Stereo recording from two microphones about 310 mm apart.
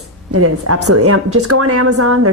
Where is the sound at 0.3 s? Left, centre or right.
Right.